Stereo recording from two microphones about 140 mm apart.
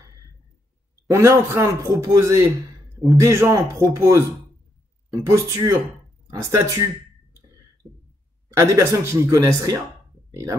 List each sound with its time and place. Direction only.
1.1 s a man's voice: 20° right (ahead or behind)
8.5 s a man's voice: 20° right (ahead or behind)